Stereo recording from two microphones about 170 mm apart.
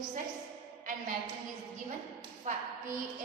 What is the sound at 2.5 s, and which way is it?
Speech, 50° right (ahead or behind).